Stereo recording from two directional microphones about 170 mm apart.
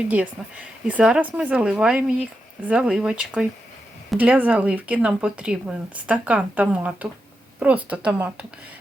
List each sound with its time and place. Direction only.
0.1 s speech: 10° right (ahead or behind)